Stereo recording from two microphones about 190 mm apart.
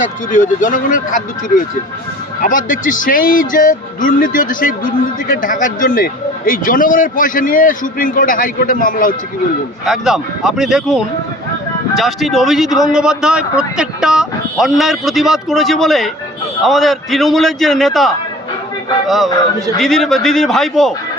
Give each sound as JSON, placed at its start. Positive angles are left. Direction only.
{"t": 0.0, "sound": "speech", "side_deg": 40}
{"t": 9.8, "sound": "a man's voice", "side_deg": 0}